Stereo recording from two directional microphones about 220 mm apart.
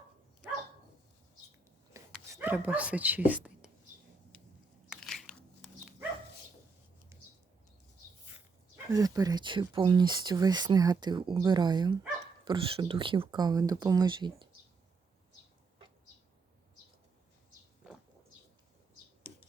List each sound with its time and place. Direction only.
2.0 s dog: 15° right (ahead or behind)
2.3 s speech: 10° right (ahead or behind)
4.9 s a sound: centre (ahead or behind)
8.7 s speech: 15° right (ahead or behind)